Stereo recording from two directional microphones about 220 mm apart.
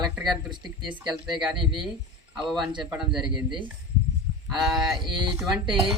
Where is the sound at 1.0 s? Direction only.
Centre (ahead or behind).